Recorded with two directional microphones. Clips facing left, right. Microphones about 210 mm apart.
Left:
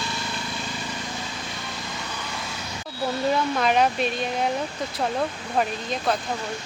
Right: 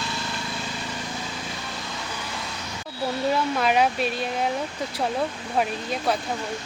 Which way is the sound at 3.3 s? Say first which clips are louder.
Even; 5° right (ahead or behind).